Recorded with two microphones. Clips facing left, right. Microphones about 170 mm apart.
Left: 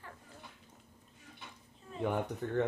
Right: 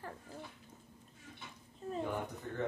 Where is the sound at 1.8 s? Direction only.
40° right (ahead or behind).